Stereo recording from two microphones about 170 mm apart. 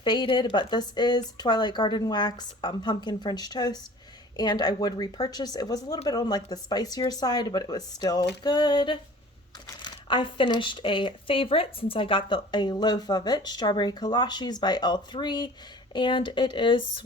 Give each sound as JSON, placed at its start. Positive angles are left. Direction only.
{"t": 0.0, "sound": "speech", "side_deg": 25}